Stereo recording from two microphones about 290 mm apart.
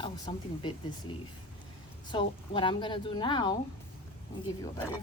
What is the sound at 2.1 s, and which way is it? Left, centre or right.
A woman's voice, centre.